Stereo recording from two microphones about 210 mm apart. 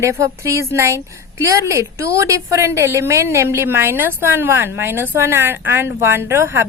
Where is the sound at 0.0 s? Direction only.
15° right (ahead or behind).